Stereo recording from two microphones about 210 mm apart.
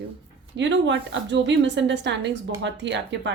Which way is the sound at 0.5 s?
60° right (ahead or behind).